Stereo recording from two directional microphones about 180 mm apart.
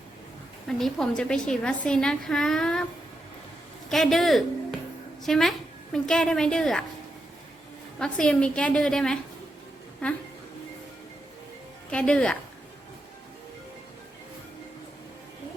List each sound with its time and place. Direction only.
0.8 s a woman's voice: 5° left (ahead or behind)
3.8 s a woman's voice: centre (ahead or behind)
7.9 s a woman's voice: 5° left (ahead or behind)
11.9 s a woman's voice: 5° left (ahead or behind)